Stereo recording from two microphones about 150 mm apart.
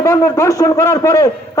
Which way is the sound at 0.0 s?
20° left (ahead or behind).